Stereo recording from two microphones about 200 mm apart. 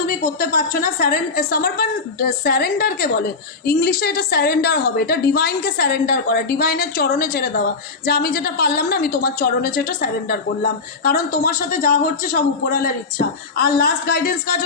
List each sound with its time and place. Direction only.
0.1 s a woman's voice: 45° left (ahead or behind)